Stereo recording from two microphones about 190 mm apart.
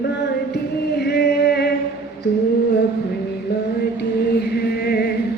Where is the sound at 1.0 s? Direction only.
60° left (ahead or behind).